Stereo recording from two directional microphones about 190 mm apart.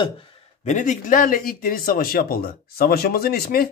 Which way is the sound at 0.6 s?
40° left (ahead or behind).